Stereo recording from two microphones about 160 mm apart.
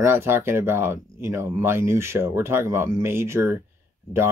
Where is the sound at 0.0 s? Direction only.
15° right (ahead or behind).